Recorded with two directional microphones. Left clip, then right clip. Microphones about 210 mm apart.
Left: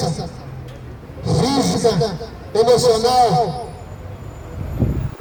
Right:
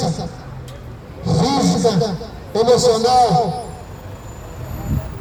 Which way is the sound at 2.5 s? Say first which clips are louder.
Even; 35° left (ahead or behind).